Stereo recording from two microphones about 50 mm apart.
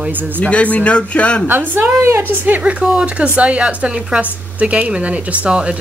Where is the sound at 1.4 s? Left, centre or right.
Right.